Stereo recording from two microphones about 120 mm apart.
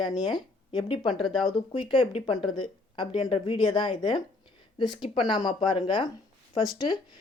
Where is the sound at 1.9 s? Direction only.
45° left (ahead or behind).